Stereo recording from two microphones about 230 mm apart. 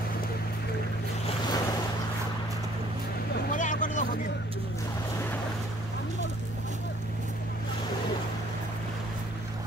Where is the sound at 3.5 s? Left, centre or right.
Left.